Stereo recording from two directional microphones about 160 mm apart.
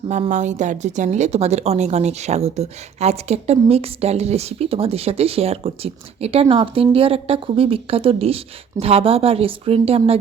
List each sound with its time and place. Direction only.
0.1 s speech: 50° right (ahead or behind)